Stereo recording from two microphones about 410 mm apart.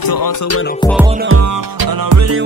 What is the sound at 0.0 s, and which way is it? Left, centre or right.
Music, left.